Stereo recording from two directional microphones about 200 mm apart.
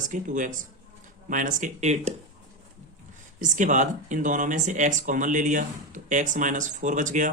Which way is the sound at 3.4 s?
40° right (ahead or behind).